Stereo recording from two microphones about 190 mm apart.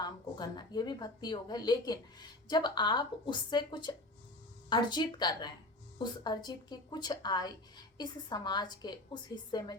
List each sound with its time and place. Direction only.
0.0 s a woman's voice: 20° left (ahead or behind)